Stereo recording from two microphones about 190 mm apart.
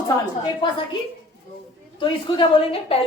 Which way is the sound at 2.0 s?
25° left (ahead or behind).